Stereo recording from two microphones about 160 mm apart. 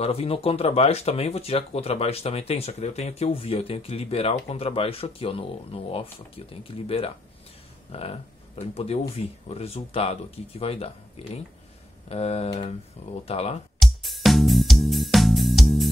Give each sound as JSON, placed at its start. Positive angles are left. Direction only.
{"t": 0.0, "sound": "speech", "side_deg": 40}
{"t": 13.7, "sound": "music", "side_deg": 0}